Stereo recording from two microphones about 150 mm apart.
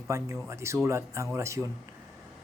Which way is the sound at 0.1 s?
20° right (ahead or behind).